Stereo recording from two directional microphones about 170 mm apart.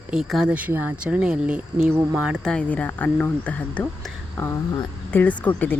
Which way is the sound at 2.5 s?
10° left (ahead or behind).